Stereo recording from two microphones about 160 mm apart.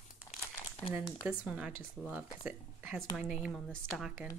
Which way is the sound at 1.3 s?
5° right (ahead or behind).